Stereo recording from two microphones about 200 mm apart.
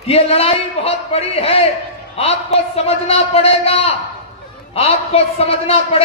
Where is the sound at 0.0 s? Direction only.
30° left (ahead or behind).